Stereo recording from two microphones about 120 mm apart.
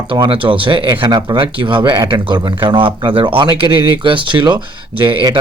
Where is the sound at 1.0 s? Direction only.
35° right (ahead or behind).